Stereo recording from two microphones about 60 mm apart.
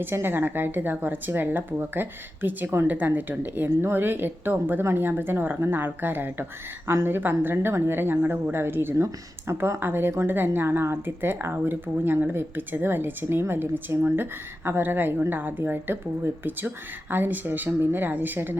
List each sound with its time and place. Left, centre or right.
0.0 s a woman's voice: right